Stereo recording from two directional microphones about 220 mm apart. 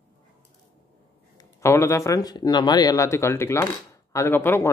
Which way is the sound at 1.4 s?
15° left (ahead or behind).